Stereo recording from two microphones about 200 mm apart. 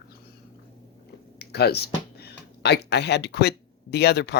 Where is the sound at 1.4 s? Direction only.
55° left (ahead or behind).